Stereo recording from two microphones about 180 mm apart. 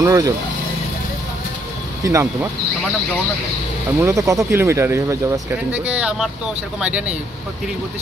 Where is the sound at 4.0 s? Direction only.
15° right (ahead or behind).